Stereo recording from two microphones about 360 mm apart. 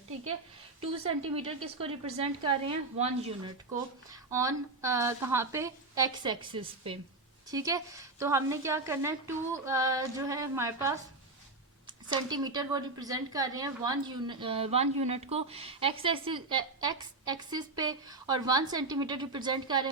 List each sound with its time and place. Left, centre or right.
1.3 s a woman's voice: centre